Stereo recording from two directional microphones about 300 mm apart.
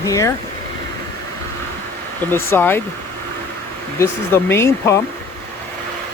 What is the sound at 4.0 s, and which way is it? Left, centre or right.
Speech, centre.